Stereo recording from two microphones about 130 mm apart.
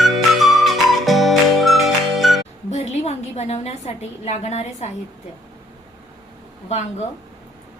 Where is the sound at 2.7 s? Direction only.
55° left (ahead or behind).